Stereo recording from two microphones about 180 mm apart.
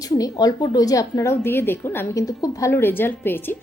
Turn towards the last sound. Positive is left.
turn(degrees=10)  # may be behind; listen again after turning